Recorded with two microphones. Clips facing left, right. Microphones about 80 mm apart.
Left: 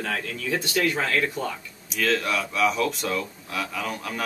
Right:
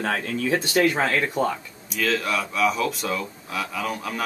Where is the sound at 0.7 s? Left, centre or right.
Right.